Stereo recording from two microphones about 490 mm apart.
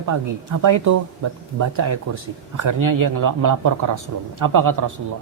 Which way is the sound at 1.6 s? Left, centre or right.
Right.